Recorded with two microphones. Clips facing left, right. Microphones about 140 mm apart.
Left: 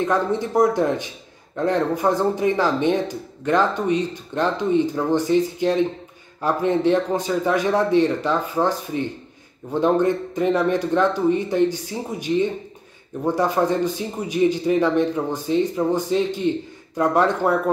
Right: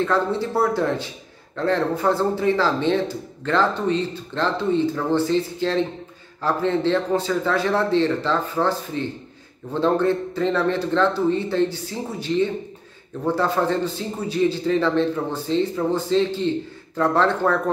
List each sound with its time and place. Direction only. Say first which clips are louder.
0.0 s a man's voice: even; 15° left (ahead or behind)